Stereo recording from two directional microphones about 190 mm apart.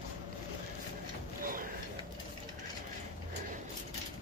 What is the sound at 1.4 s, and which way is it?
Mechanisms, 45° right (ahead or behind).